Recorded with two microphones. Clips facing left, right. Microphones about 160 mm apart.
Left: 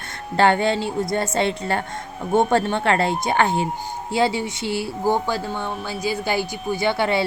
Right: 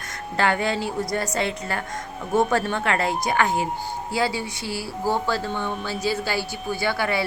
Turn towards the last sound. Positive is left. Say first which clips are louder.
# left 4 dB
turn(degrees=25)  # may be behind; listen again after turning